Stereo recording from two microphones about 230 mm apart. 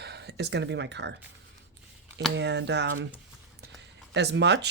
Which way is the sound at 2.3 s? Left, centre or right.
Right.